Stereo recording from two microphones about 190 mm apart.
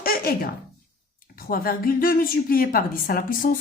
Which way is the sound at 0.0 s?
50° left (ahead or behind).